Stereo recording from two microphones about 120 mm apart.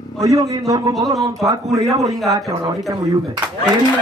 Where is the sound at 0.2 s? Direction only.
25° right (ahead or behind).